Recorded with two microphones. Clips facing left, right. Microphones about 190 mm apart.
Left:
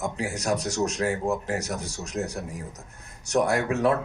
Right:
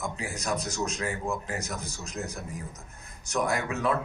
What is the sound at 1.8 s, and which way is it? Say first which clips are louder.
Speech: left 4 dB; 75° left (ahead or behind).